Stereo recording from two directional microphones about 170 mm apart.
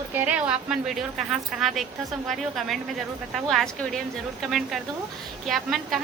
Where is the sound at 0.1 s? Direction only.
10° right (ahead or behind).